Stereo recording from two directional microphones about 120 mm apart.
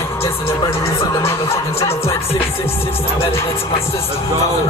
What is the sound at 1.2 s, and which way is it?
Music, 25° left (ahead or behind).